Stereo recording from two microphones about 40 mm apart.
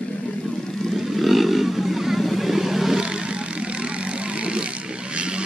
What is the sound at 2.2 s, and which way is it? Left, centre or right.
Vehicle, centre.